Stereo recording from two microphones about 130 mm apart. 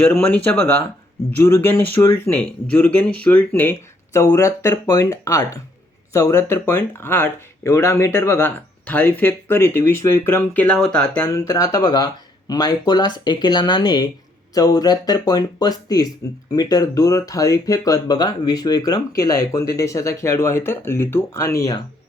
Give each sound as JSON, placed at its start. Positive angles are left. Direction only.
{"t": 0.0, "sound": "speech", "side_deg": 10}
{"t": 11.3, "sound": "speech", "side_deg": 25}